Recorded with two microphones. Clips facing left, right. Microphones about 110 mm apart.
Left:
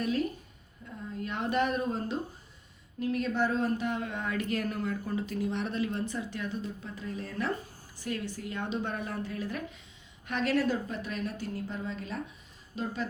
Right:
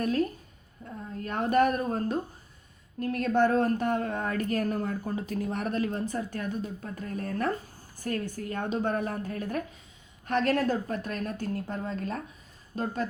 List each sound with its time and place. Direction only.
0.0 s a woman's voice: 45° right (ahead or behind)
0.8 s a woman's voice: 35° right (ahead or behind)
1.2 s a woman's voice: 45° right (ahead or behind)